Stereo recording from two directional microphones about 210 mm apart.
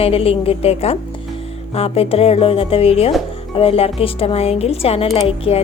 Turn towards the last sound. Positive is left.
turn(degrees=25)  # may be behind; listen again after turning